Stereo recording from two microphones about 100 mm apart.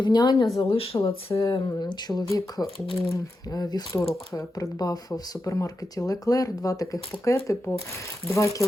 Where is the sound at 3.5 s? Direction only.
40° left (ahead or behind).